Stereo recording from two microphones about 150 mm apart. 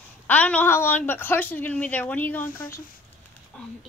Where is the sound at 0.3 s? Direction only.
10° left (ahead or behind).